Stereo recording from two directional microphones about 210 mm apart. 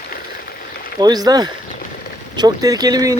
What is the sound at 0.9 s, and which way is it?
Speech, 20° right (ahead or behind).